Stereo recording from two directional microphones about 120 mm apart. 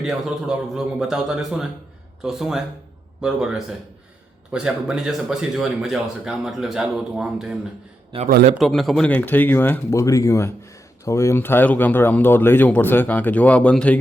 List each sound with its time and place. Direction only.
0.0 s speech: 5° right (ahead or behind)
8.1 s a man's voice: 65° right (ahead or behind)
8.5 s speech: centre (ahead or behind)
9.0 s speech: 15° left (ahead or behind)